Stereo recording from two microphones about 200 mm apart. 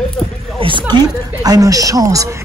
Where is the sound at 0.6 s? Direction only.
25° right (ahead or behind).